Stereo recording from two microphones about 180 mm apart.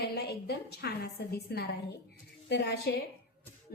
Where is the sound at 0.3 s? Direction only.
65° left (ahead or behind).